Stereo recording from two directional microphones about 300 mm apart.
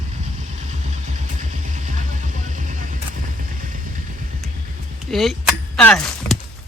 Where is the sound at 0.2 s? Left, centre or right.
Right.